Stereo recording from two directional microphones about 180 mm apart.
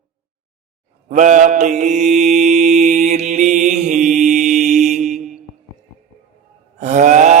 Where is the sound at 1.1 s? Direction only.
45° right (ahead or behind).